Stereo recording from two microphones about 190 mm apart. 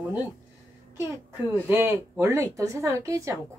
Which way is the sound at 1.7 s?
10° right (ahead or behind).